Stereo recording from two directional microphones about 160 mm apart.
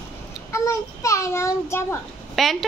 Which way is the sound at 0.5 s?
20° left (ahead or behind).